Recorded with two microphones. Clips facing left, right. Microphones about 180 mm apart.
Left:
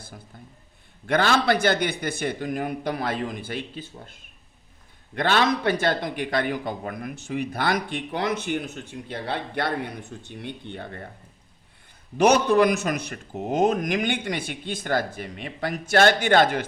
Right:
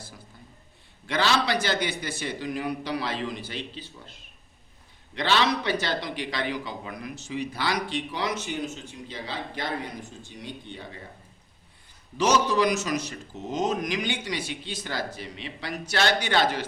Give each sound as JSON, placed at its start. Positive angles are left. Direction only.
{"t": 1.0, "sound": "a man's voice", "side_deg": 50}
{"t": 12.1, "sound": "speech", "side_deg": 55}